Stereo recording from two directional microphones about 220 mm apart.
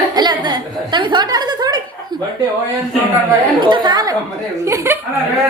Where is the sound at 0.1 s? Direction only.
20° right (ahead or behind).